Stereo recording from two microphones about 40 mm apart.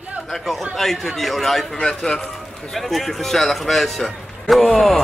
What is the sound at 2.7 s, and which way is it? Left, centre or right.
Speech, centre.